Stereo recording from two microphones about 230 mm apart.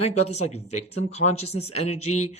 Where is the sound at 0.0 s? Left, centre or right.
Left.